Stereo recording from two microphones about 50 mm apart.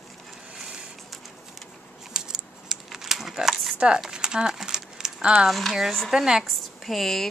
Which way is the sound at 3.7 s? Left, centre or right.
Centre.